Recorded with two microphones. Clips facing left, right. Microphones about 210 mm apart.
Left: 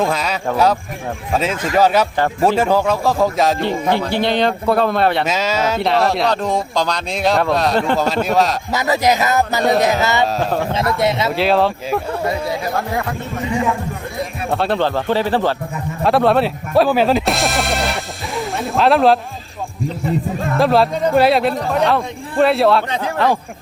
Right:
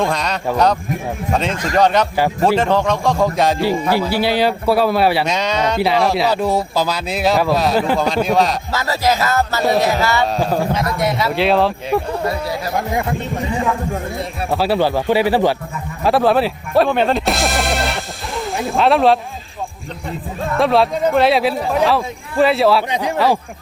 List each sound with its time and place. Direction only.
0.0 s speech: 5° left (ahead or behind)
8.7 s music: 20° left (ahead or behind)
9.8 s speech: 20° left (ahead or behind)
10.3 s speech: 5° right (ahead or behind)
14.5 s speech: 5° right (ahead or behind)
20.6 s speech: centre (ahead or behind)